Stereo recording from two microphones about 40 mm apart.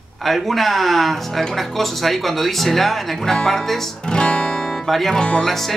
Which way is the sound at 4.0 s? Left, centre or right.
Left.